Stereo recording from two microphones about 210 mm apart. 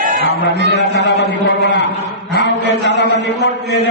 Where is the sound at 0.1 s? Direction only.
55° right (ahead or behind).